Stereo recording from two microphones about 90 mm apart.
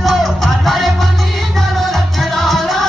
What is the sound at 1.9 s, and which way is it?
Music, centre (ahead or behind).